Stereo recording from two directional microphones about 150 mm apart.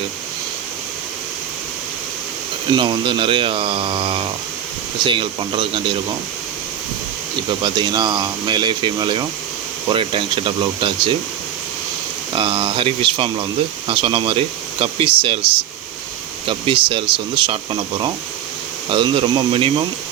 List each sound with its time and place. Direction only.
2.7 s speech: 35° right (ahead or behind)
7.6 s speech: 30° right (ahead or behind)
12.3 s speech: 35° right (ahead or behind)
16.5 s speech: 35° right (ahead or behind)